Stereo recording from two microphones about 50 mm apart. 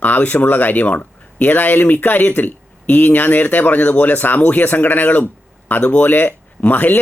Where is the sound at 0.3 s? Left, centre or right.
Left.